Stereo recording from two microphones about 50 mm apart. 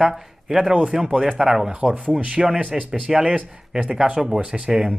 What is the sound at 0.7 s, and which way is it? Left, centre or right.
Speech, right.